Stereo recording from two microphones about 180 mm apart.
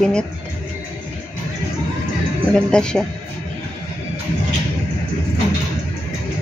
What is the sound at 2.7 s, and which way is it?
Speech, 5° left (ahead or behind).